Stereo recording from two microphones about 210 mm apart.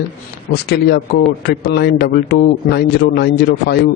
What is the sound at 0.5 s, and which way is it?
A man's voice, 50° left (ahead or behind).